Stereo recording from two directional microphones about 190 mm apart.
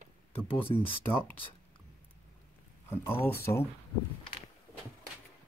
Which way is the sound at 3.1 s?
15° left (ahead or behind).